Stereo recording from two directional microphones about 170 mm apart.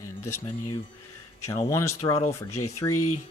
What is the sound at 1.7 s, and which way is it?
Speech, 15° left (ahead or behind).